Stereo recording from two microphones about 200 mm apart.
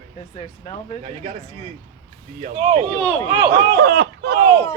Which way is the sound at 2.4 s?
35° right (ahead or behind).